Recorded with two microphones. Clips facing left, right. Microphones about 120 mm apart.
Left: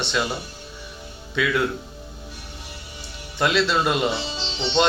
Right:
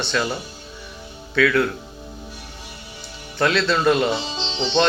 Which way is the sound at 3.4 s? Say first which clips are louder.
Right 1 dB; 15° left (ahead or behind).